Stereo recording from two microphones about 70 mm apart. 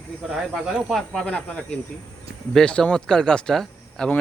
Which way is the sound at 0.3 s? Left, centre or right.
Centre.